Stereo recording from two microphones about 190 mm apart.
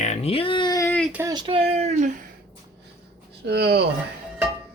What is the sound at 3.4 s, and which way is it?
Speech, 60° right (ahead or behind).